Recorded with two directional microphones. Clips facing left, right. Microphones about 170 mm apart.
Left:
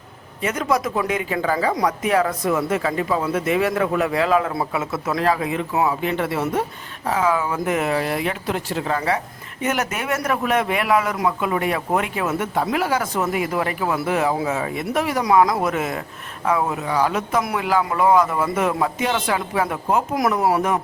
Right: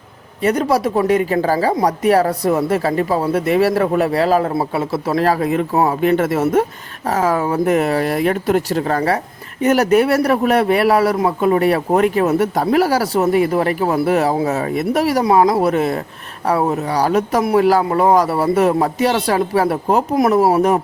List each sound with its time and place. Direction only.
0.4 s speech: 35° right (ahead or behind)